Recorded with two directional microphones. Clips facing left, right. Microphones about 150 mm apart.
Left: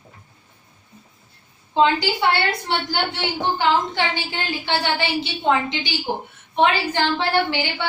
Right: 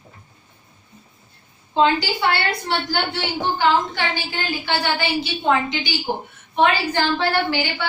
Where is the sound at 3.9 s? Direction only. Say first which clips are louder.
Left 1 dB; 25° left (ahead or behind).